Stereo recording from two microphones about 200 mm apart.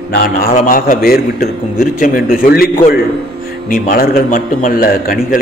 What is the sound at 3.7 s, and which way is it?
A man's voice, 45° left (ahead or behind).